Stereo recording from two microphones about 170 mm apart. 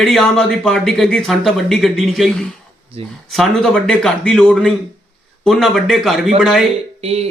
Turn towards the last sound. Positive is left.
turn(degrees=-35)  # may be behind; listen again after turning